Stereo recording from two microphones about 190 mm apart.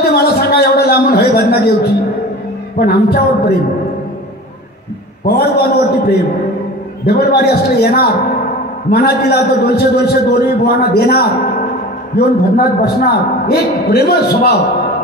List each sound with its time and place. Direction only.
0.0 s a sound: 55° left (ahead or behind)
2.8 s speech: 55° left (ahead or behind)
5.2 s a man's voice: 55° left (ahead or behind)